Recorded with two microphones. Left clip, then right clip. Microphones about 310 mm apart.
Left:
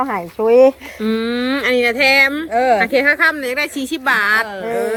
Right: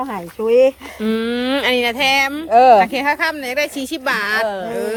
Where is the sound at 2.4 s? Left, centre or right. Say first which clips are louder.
Right 5 dB; right.